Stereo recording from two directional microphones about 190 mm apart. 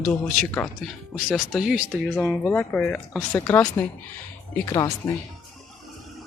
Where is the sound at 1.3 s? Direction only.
5° right (ahead or behind).